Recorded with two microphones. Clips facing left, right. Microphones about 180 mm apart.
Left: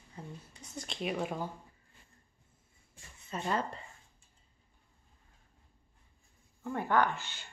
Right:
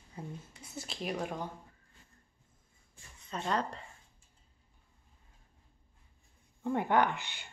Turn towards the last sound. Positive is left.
turn(degrees=-15)  # may be behind; listen again after turning